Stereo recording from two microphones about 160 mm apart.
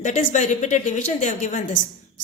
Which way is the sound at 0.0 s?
50° left (ahead or behind).